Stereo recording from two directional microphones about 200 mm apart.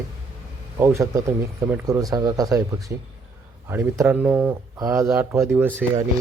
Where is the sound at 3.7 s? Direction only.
10° right (ahead or behind).